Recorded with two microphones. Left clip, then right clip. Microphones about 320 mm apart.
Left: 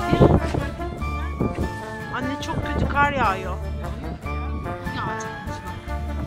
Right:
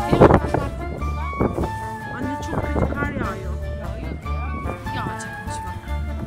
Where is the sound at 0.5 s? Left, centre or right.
Right.